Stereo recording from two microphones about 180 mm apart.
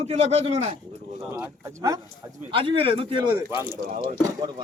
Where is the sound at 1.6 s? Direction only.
20° right (ahead or behind).